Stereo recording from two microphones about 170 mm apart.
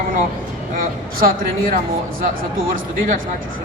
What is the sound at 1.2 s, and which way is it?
Speech, 55° right (ahead or behind).